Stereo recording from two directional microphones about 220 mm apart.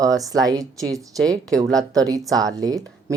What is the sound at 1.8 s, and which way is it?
Speech, 15° right (ahead or behind).